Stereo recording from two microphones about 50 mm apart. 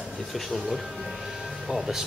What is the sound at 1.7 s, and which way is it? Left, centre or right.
Speech, centre.